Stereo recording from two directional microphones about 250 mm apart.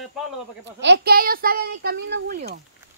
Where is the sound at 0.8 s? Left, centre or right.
Right.